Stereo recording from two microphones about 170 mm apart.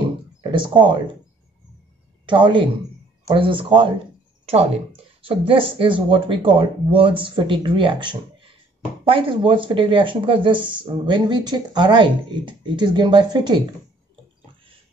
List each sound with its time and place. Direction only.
0.4 s speech: 30° right (ahead or behind)
2.2 s speech: 30° right (ahead or behind)